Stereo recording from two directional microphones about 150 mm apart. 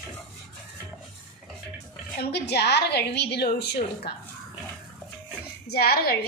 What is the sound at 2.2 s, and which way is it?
A woman's voice, 90° left.